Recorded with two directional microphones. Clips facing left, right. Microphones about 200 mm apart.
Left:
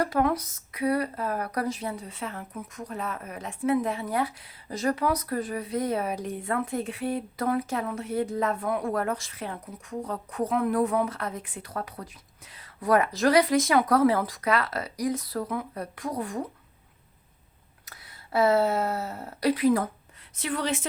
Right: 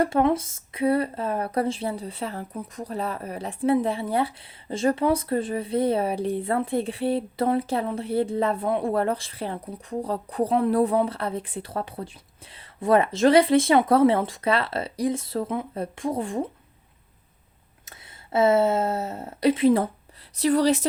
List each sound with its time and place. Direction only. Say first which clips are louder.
0.0 s speech: right 4 dB; 25° right (ahead or behind)
17.8 s a woman's voice: right 2 dB; 25° right (ahead or behind)